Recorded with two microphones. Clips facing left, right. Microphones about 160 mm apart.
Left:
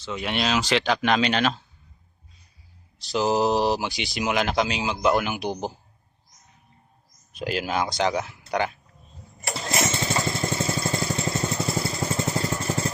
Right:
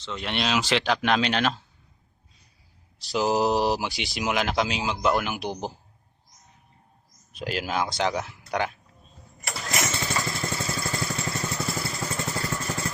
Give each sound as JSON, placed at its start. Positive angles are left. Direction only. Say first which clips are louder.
{"t": 0.0, "sound": "speech", "louder": "left 2 dB", "side_deg": 5}
{"t": 3.0, "sound": "speech", "louder": "left 1 dB", "side_deg": -5}
{"t": 7.3, "sound": "speech", "louder": "left 2 dB", "side_deg": 0}
{"t": 9.5, "sound": "lawn mower", "louder": "left 3 dB", "side_deg": 25}